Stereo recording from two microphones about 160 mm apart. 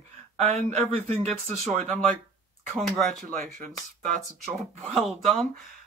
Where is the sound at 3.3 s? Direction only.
55° right (ahead or behind).